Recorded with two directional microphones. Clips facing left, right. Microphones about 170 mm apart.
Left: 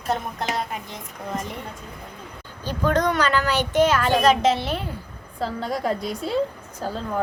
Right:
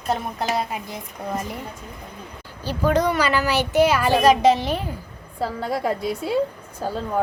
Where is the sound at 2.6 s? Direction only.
10° right (ahead or behind).